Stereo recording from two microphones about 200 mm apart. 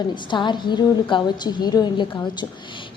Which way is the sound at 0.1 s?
25° left (ahead or behind).